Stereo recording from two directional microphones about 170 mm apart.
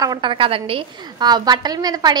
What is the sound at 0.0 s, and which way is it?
A woman's voice, 25° right (ahead or behind).